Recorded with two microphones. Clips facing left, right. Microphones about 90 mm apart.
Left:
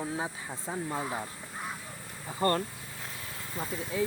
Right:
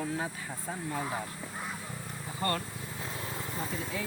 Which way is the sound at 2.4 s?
35° left (ahead or behind).